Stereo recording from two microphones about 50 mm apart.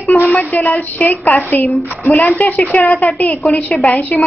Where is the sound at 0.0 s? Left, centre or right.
Left.